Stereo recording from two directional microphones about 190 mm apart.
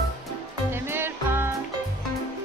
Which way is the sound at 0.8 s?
10° right (ahead or behind).